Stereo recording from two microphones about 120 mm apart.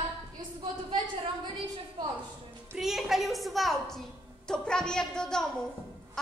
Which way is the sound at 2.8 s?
5° right (ahead or behind).